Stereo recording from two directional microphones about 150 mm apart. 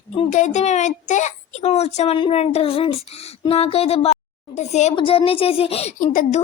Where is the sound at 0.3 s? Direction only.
55° left (ahead or behind).